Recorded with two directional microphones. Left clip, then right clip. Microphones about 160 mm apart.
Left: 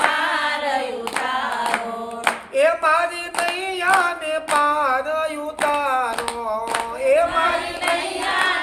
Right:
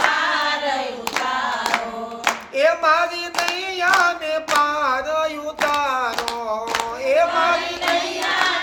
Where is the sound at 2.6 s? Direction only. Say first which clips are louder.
Right 1 dB; 5° left (ahead or behind).